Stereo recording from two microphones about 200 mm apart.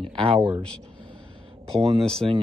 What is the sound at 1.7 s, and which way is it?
Speech, 30° right (ahead or behind).